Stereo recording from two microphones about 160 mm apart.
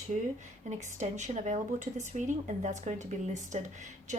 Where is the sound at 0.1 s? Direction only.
50° right (ahead or behind).